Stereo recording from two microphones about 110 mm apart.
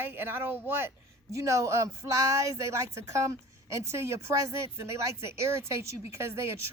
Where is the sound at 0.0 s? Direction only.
20° right (ahead or behind).